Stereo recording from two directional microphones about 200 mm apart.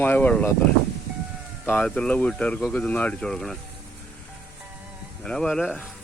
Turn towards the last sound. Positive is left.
turn(degrees=5)  # may be behind; listen again after turning